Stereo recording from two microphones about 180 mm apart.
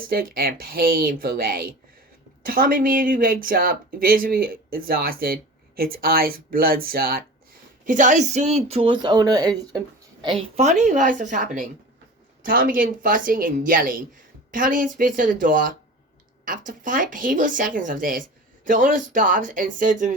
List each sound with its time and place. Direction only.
0.1 s speech: 55° right (ahead or behind)
7.9 s speech: 45° right (ahead or behind)